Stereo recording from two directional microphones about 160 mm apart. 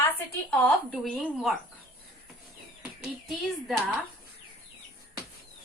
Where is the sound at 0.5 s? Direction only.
5° left (ahead or behind).